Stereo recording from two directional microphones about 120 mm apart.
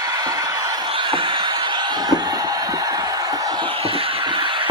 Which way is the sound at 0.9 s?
45° right (ahead or behind).